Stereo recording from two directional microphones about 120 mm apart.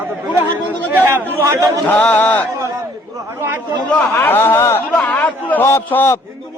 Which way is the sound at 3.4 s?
20° right (ahead or behind).